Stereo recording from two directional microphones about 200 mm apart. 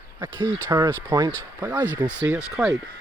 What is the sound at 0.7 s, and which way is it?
Speech, 20° right (ahead or behind).